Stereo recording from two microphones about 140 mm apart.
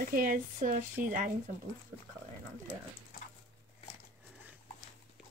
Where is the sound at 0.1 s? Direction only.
85° right.